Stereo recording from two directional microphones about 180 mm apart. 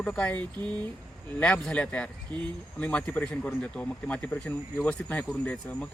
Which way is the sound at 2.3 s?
25° right (ahead or behind).